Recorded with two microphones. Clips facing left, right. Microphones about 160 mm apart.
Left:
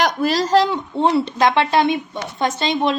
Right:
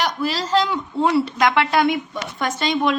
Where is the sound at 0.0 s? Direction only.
45° left (ahead or behind).